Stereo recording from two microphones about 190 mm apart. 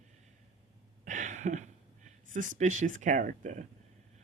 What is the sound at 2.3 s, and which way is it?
Speech, 40° right (ahead or behind).